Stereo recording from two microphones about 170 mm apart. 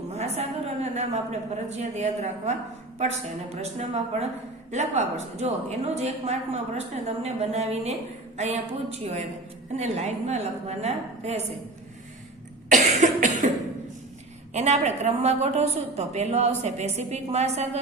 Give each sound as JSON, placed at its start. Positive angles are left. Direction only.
{"t": 0.1, "sound": "a woman's voice", "side_deg": -40}
{"t": 12.7, "sound": "cough", "side_deg": -45}
{"t": 14.5, "sound": "a woman's voice", "side_deg": -40}